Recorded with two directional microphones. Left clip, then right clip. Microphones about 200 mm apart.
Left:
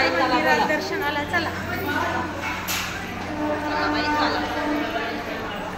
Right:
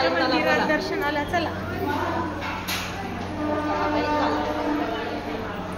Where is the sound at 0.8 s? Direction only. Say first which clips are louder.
Even; 60° right (ahead or behind).